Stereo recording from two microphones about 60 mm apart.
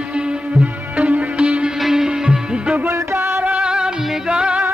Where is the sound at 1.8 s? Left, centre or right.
Centre.